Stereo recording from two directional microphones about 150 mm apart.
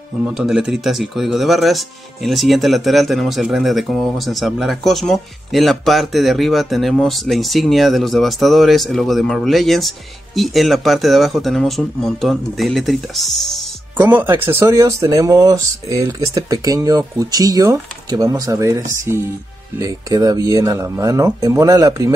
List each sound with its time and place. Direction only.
0.2 s speech: 5° right (ahead or behind)
13.9 s speech: 15° right (ahead or behind)